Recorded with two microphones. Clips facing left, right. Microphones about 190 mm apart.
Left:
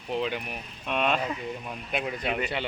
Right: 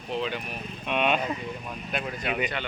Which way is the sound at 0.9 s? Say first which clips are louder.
Right 1 dB; centre (ahead or behind).